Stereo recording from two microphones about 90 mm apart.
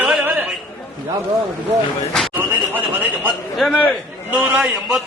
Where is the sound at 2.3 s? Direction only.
20° right (ahead or behind).